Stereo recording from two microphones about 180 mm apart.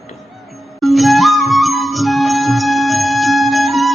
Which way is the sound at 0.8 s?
Centre (ahead or behind).